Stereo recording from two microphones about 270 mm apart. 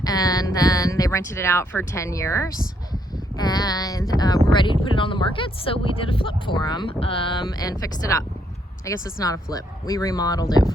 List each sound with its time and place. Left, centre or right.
0.0 s speech: centre